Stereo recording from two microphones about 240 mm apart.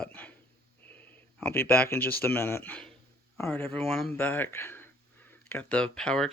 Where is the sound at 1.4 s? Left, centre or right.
Centre.